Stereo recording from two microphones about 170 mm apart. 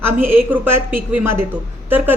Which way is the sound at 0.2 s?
10° right (ahead or behind).